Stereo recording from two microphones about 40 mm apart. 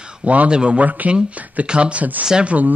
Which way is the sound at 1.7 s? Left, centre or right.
Right.